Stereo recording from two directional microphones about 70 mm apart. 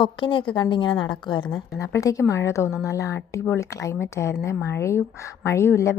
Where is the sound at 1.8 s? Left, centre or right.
Left.